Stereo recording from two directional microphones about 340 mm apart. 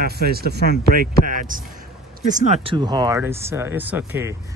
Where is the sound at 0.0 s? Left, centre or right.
Right.